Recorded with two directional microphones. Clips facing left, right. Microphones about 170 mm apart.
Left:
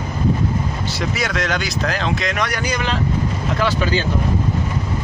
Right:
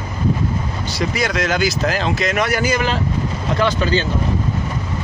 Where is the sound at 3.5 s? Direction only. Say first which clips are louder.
Right 2 dB; 10° left (ahead or behind).